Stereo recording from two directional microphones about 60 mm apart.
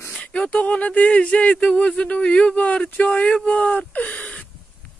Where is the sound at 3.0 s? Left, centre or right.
Centre.